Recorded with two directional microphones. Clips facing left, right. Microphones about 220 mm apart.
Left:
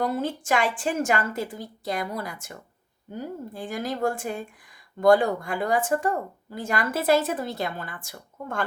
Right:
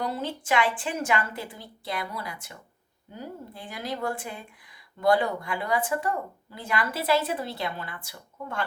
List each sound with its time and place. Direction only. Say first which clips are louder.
0.0 s speech: left 5 dB; 50° left (ahead or behind)